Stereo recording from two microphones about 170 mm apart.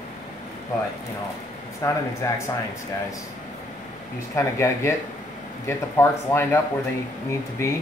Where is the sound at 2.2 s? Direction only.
15° left (ahead or behind).